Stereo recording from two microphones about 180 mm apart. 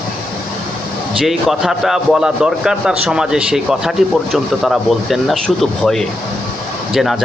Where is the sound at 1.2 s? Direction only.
Centre (ahead or behind).